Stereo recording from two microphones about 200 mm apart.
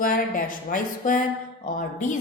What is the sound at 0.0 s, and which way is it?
A woman's voice, 40° left (ahead or behind).